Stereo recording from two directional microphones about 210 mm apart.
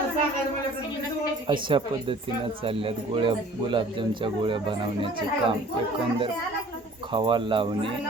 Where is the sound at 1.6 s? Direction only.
25° right (ahead or behind).